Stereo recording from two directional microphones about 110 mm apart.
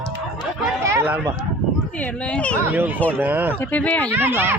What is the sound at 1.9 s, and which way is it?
Speech, 10° left (ahead or behind).